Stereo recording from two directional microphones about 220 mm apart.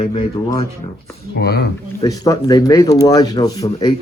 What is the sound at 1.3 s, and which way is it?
Speech, 45° left (ahead or behind).